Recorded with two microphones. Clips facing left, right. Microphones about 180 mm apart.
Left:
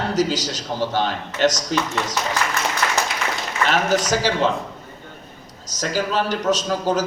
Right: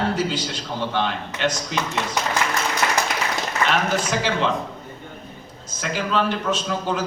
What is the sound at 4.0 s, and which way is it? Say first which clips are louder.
Speech: left 3 dB; 40° left (ahead or behind).